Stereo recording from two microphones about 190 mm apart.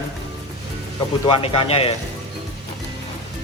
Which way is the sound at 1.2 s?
30° left (ahead or behind).